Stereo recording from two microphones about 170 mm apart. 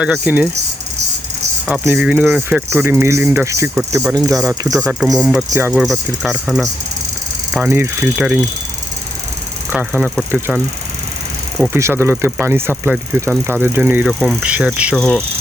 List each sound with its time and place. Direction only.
0.0 s speech: 10° right (ahead or behind)
1.8 s speech: 10° right (ahead or behind)
4.9 s speech: centre (ahead or behind)
9.6 s speech: 10° right (ahead or behind)
11.7 s speech: 15° right (ahead or behind)
14.1 s speech: 5° left (ahead or behind)
14.4 s speech: 5° right (ahead or behind)
14.9 s speech: 5° left (ahead or behind)